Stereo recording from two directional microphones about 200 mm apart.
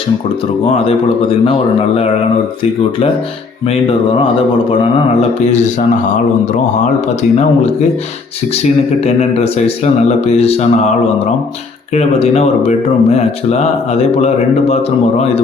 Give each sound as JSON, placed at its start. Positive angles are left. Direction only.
{"t": 3.7, "sound": "speech", "side_deg": 25}
{"t": 5.4, "sound": "speech", "side_deg": 35}
{"t": 7.2, "sound": "speech", "side_deg": 35}
{"t": 9.0, "sound": "speech", "side_deg": 30}
{"t": 11.9, "sound": "speech", "side_deg": 30}